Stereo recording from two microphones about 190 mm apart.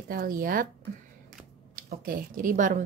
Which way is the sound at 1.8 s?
50° right (ahead or behind).